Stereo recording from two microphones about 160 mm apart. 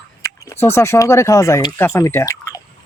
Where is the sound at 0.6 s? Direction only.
15° left (ahead or behind).